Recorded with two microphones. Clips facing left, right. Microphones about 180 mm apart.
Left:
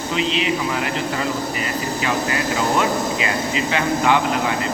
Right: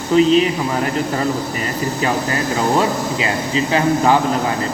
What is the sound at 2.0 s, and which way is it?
A man's voice, 35° right (ahead or behind).